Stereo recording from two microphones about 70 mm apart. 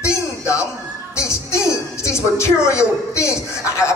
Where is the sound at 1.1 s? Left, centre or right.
Left.